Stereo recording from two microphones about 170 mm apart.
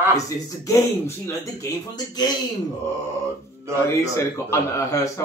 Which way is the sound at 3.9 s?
15° left (ahead or behind).